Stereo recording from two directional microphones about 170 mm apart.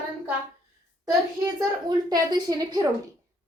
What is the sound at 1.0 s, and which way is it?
A woman's voice, 25° right (ahead or behind).